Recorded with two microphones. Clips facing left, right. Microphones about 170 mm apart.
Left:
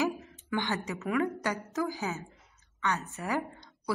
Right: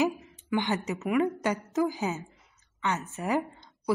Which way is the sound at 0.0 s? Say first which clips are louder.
Right 3 dB; 20° right (ahead or behind).